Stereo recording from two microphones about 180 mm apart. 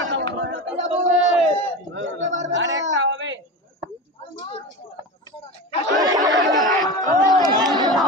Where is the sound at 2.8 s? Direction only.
90° right.